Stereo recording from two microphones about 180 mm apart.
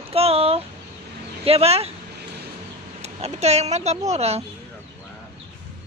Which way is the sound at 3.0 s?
35° right (ahead or behind).